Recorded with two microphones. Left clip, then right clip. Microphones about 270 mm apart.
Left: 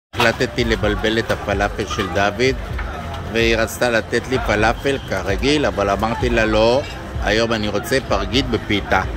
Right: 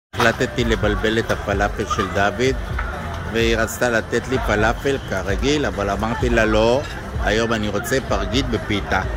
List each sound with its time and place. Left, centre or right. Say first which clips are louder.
0.2 s speech: left 1 dB; centre